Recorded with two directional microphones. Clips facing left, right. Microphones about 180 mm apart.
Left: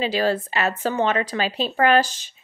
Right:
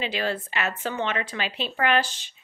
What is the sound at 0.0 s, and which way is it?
Speech, 35° left (ahead or behind).